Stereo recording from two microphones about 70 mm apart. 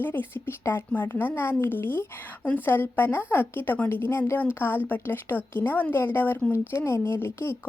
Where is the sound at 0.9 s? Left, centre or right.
Left.